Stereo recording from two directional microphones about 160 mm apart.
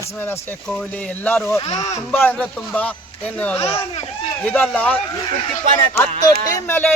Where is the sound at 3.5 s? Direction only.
40° left (ahead or behind).